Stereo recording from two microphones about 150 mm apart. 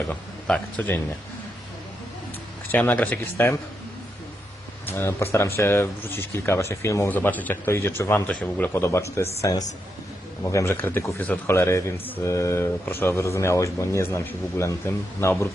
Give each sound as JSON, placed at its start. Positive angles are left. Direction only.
{"t": 0.1, "sound": "speech", "side_deg": 10}
{"t": 2.6, "sound": "speech", "side_deg": 10}
{"t": 4.9, "sound": "speech", "side_deg": 15}